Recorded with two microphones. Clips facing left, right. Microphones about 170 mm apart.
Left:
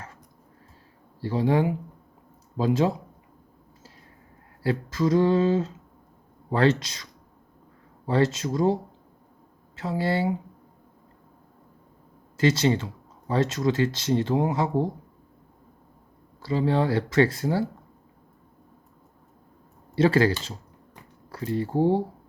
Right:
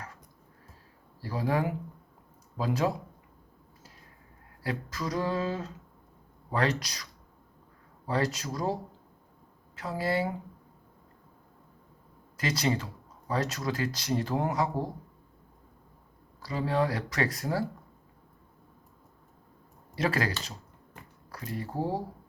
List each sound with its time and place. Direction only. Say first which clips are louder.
1.2 s speech: left 6 dB; 25° left (ahead or behind)
4.6 s speech: left 9 dB; 25° left (ahead or behind)
12.4 s speech: left 8 dB; 25° left (ahead or behind)
16.4 s speech: left 5 dB; 25° left (ahead or behind)
20.0 s speech: left 9 dB; 30° left (ahead or behind)